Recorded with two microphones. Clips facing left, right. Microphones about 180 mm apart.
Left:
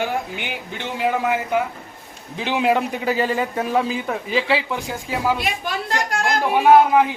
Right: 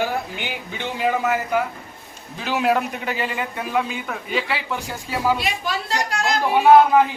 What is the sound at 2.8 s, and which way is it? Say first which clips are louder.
A man's voice: left 4 dB; 35° left (ahead or behind).